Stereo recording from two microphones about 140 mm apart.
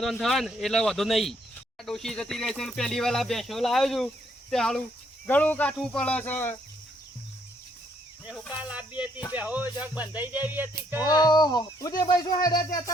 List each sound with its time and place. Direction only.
0.0 s speech: centre (ahead or behind)
8.3 s speech: 10° right (ahead or behind)
11.0 s speech: 30° left (ahead or behind)